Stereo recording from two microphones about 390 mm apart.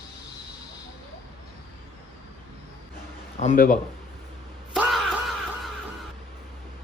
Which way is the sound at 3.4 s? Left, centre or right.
Centre.